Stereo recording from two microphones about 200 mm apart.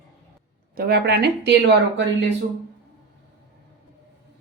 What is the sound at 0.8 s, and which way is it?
Speech, 50° right (ahead or behind).